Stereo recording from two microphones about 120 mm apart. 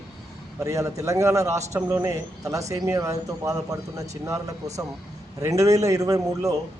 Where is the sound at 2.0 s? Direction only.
30° right (ahead or behind).